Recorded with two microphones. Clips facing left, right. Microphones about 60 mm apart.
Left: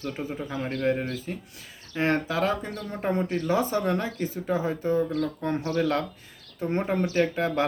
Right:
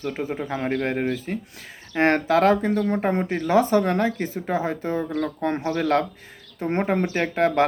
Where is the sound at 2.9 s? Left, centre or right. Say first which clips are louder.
Right 4 dB; right.